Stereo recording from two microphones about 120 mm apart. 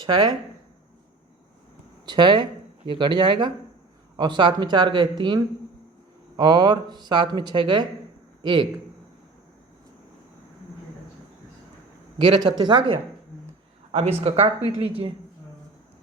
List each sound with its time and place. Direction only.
0.0 s speech: 40° right (ahead or behind)
2.0 s speech: 40° right (ahead or behind)
12.2 s speech: 40° right (ahead or behind)
13.9 s speech: 60° right (ahead or behind)
14.4 s a woman's voice: 50° right (ahead or behind)